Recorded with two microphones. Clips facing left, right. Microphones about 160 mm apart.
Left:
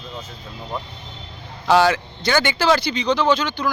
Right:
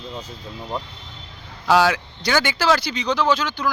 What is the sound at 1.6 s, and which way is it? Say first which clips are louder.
Speech: left 1 dB; 5° right (ahead or behind).